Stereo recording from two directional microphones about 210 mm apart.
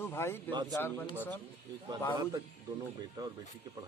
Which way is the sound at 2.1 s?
15° right (ahead or behind).